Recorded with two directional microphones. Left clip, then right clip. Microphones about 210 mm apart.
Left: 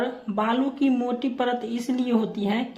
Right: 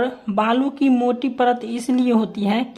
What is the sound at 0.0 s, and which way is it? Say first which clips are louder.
Speech: right 6 dB; 40° right (ahead or behind).